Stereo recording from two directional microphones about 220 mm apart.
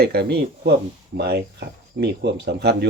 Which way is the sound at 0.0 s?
45° right (ahead or behind).